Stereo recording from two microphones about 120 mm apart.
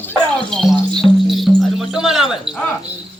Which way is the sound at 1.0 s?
35° left (ahead or behind).